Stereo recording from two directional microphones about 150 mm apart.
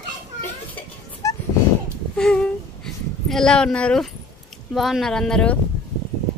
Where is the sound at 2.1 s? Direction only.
5° left (ahead or behind).